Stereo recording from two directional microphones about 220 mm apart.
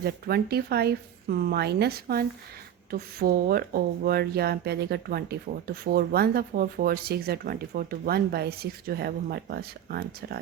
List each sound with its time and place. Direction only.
0.0 s speech: 45° right (ahead or behind)